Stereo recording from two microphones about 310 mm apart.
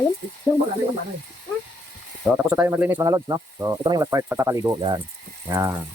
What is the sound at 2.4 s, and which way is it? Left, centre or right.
Speech, centre.